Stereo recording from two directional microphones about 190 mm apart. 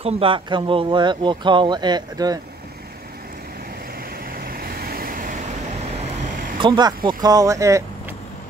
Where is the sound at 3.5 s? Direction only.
50° right (ahead or behind).